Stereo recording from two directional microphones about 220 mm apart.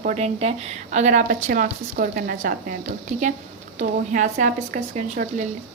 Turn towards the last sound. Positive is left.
turn(degrees=-35)  # may be behind; listen again after turning